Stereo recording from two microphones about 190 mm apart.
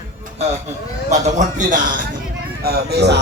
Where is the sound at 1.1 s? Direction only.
40° right (ahead or behind).